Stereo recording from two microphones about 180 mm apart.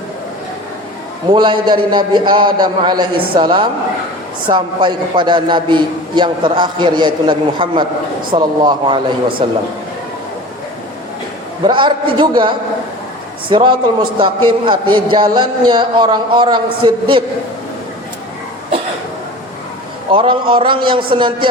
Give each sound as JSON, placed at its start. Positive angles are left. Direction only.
{"t": 1.3, "sound": "a man's voice", "side_deg": -25}
{"t": 11.6, "sound": "a man's voice", "side_deg": -25}
{"t": 20.1, "sound": "a man's voice", "side_deg": -30}